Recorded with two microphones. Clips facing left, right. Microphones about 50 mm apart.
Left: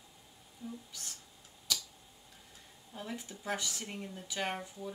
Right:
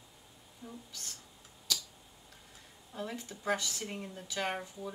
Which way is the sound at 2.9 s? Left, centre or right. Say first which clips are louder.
Right 2 dB; centre.